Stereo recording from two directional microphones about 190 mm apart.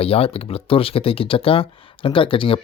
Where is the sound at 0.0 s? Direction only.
30° left (ahead or behind).